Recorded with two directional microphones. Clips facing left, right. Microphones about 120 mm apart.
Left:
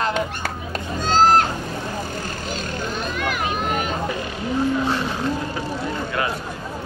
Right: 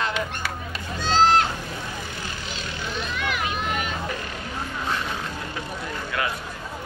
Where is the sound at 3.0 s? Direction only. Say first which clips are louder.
Left 2 dB; 45° left (ahead or behind).